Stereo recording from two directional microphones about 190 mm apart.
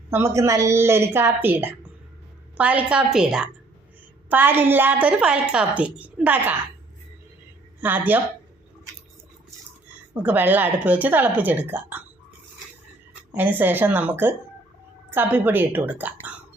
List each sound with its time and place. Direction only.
0.1 s a woman's voice: 15° right (ahead or behind)
7.8 s a woman's voice: 10° right (ahead or behind)
10.2 s a woman's voice: 10° right (ahead or behind)
13.3 s a woman's voice: 10° right (ahead or behind)